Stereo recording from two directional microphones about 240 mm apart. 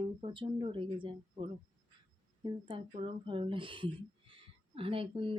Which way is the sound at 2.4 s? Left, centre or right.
Centre.